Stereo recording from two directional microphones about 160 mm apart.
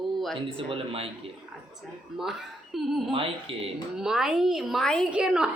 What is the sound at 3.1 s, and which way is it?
Speech, 35° right (ahead or behind).